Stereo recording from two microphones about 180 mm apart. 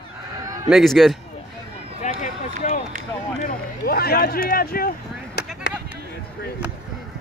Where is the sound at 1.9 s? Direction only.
40° left (ahead or behind).